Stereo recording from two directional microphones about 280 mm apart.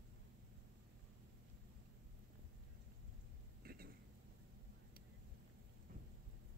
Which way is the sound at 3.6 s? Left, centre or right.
Right.